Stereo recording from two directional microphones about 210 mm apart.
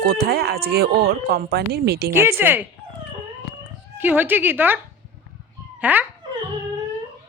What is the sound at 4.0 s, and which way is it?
Speech, 10° right (ahead or behind).